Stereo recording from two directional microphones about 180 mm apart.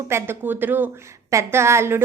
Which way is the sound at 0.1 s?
15° right (ahead or behind).